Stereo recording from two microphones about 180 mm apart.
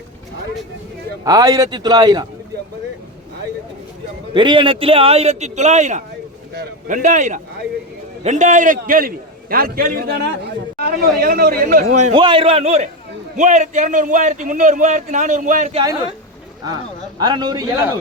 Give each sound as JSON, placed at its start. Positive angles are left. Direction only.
{"t": 1.2, "sound": "speech", "side_deg": -20}
{"t": 4.4, "sound": "a man's voice", "side_deg": -25}
{"t": 12.1, "sound": "a man's voice", "side_deg": -25}
{"t": 16.6, "sound": "speech", "side_deg": -25}